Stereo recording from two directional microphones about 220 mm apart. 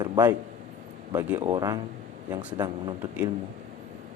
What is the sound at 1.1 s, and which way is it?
Speech, 10° right (ahead or behind).